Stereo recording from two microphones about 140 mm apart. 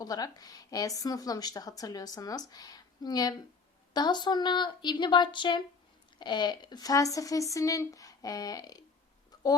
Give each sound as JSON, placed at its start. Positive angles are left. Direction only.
{"t": 0.0, "sound": "a woman's voice", "side_deg": 25}